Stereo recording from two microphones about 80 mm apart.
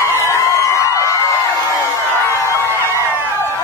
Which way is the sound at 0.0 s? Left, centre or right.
Left.